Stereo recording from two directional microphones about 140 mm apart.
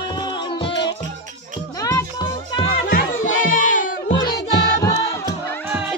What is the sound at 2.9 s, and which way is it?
Music, 65° left (ahead or behind).